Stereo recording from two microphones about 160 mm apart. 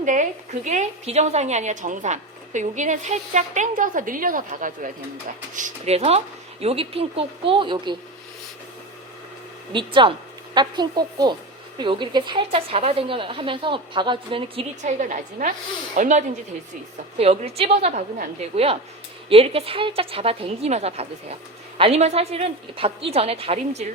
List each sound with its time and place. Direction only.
0.0 s a woman's voice: 50° right (ahead or behind); by 7.9 s 30° right (ahead or behind)
9.7 s a woman's voice: 30° right (ahead or behind)
14.8 s a woman's voice: 50° right (ahead or behind)
17.2 s a woman's voice: 40° right (ahead or behind)